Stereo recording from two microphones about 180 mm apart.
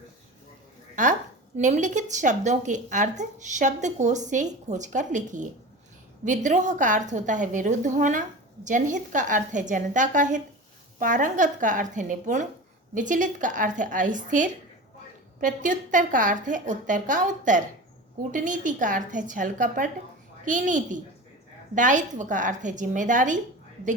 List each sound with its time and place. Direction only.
1.0 s a woman's voice: 45° right (ahead or behind)